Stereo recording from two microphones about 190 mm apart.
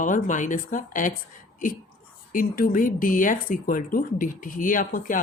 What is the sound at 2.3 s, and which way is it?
Speech, 50° left (ahead or behind).